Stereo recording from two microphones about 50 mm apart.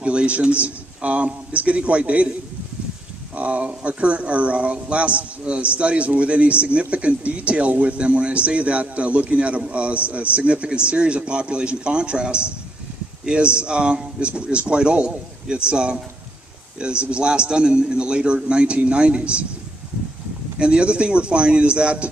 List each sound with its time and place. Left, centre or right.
0.0 s speech: right
3.3 s speech: right
20.5 s speech: centre